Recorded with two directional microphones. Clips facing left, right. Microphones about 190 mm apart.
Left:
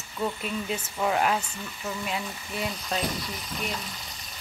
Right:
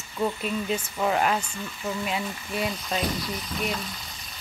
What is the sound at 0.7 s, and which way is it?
Speech, centre (ahead or behind).